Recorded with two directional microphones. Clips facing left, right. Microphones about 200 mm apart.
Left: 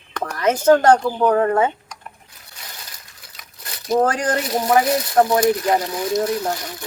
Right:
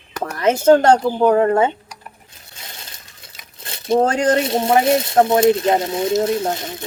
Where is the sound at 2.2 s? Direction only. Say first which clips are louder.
Right 1 dB; 25° right (ahead or behind).